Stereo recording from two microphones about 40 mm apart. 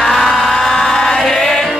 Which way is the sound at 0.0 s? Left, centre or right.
Centre.